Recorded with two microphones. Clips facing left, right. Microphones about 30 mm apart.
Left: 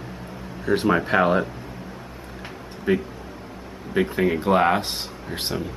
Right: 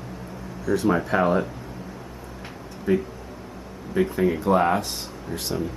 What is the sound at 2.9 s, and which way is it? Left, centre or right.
Speech, left.